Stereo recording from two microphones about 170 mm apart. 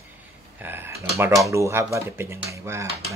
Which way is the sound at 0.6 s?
10° right (ahead or behind).